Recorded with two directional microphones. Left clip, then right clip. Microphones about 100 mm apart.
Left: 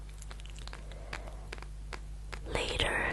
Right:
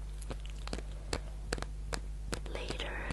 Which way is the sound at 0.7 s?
50° right (ahead or behind).